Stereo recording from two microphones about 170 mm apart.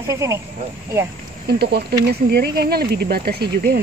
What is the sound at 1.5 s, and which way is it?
Speech, 70° right (ahead or behind).